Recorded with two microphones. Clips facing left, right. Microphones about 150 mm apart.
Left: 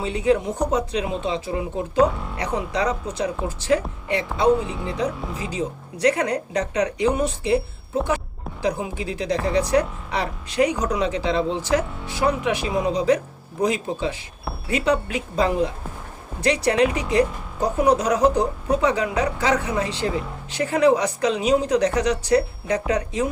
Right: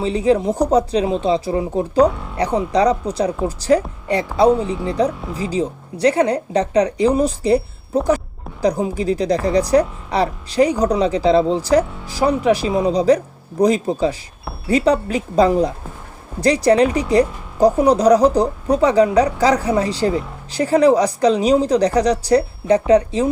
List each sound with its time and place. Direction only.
0.0 s speech: 30° right (ahead or behind)
2.0 s speech: centre (ahead or behind)
2.4 s speech: 35° right (ahead or behind)
8.6 s speech: 40° right (ahead or behind)